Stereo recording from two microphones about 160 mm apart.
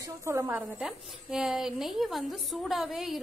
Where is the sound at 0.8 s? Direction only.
5° right (ahead or behind).